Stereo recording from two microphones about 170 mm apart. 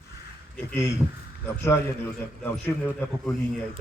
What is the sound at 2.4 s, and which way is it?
Speech, 10° left (ahead or behind).